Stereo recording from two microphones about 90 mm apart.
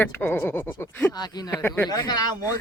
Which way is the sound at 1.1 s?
50° left (ahead or behind).